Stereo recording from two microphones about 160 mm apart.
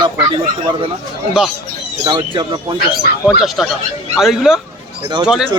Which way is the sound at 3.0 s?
70° left (ahead or behind).